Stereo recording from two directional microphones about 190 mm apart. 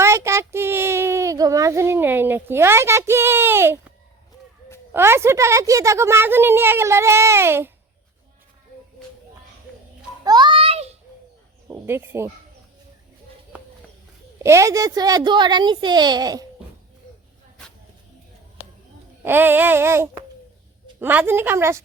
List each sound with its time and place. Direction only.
0.0 s a woman's voice: 15° right (ahead or behind)
10.2 s a sound: 25° right (ahead or behind)
11.7 s a woman's voice: 15° right (ahead or behind)
14.3 s a woman's voice: 15° right (ahead or behind)
19.2 s a woman's voice: 10° right (ahead or behind)